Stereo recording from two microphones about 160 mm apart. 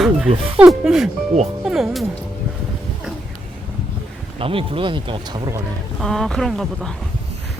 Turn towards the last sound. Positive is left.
turn(degrees=0)  # may be behind; listen again after turning